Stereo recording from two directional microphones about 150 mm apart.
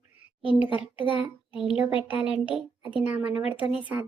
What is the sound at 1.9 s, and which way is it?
Speech, 35° left (ahead or behind).